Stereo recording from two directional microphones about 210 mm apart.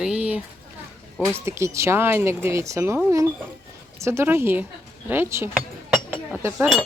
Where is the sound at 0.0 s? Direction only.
5° right (ahead or behind).